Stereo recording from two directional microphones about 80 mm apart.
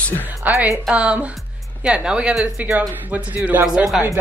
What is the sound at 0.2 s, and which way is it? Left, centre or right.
A woman's voice, right.